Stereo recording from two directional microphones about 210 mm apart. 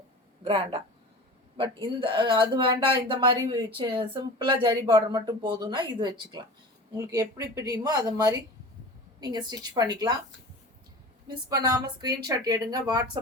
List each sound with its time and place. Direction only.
0.4 s speech: 25° right (ahead or behind)
11.4 s speech: 20° right (ahead or behind)